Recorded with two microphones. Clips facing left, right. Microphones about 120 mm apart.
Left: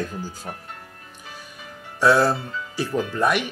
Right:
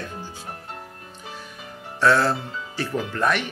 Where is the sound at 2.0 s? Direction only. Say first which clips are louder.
Left 2 dB; 15° left (ahead or behind).